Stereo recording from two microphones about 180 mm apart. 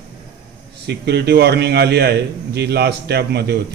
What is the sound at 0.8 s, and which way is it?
A man's voice, 70° right (ahead or behind).